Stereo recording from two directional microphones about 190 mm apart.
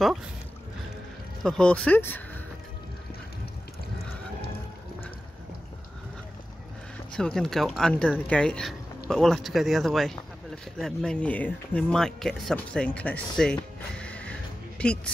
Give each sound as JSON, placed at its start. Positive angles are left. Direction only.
{"t": 1.4, "sound": "speech", "side_deg": 5}
{"t": 7.2, "sound": "speech", "side_deg": 5}